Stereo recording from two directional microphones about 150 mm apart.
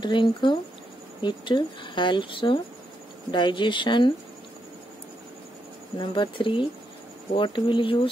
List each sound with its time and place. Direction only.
0.0 s speech: 30° left (ahead or behind)
5.9 s speech: 35° left (ahead or behind)